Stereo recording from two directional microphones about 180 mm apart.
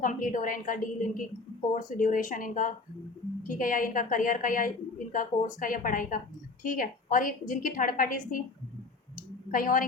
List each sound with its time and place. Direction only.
0.0 s a woman's voice: 50° left (ahead or behind)
9.5 s a woman's voice: 50° left (ahead or behind)